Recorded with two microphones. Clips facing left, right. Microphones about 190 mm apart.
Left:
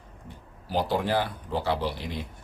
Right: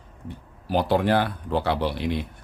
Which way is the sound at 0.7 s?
65° right (ahead or behind).